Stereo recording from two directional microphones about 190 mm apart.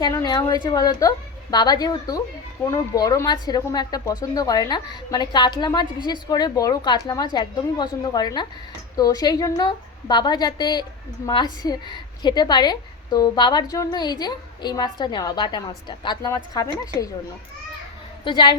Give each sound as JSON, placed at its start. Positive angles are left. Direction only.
{"t": 0.0, "sound": "a woman's voice", "side_deg": 20}
{"t": 18.3, "sound": "a woman's voice", "side_deg": 25}